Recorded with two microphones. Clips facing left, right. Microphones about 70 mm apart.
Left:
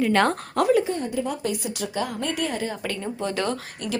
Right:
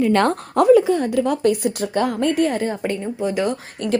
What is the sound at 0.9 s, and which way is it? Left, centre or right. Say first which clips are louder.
A woman's voice: right 8 dB; right.